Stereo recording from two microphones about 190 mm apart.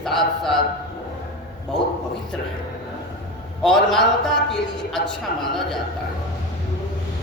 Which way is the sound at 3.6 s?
Centre (ahead or behind).